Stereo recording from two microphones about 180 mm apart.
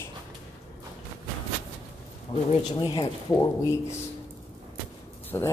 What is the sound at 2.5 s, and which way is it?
Speech, 25° left (ahead or behind).